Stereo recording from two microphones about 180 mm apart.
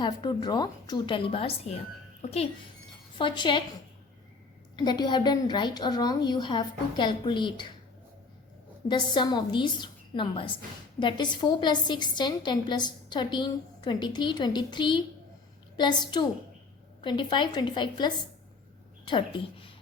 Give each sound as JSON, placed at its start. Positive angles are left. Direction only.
{"t": 0.0, "sound": "a woman's voice", "side_deg": 25}
{"t": 3.2, "sound": "a woman's voice", "side_deg": 25}
{"t": 4.8, "sound": "a woman's voice", "side_deg": 25}
{"t": 8.9, "sound": "a woman's voice", "side_deg": 25}